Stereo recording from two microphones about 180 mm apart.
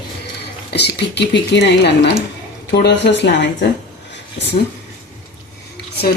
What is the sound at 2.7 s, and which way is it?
Speech, 70° left (ahead or behind).